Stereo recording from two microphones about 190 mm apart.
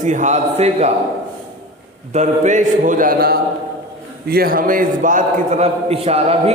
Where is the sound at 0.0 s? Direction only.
40° right (ahead or behind).